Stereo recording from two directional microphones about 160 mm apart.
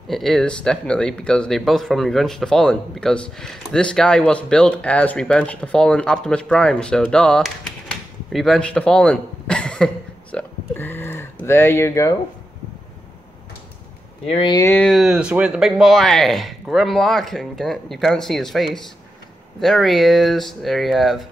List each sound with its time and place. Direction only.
0.1 s speech: centre (ahead or behind); by 12.2 s 20° left (ahead or behind)
14.2 s speech: 40° left (ahead or behind)
14.5 s speech: 20° left (ahead or behind)
14.8 s speech: centre (ahead or behind)